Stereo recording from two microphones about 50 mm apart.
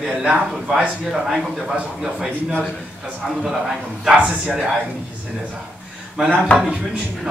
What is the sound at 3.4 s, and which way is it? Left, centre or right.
A man's voice, centre.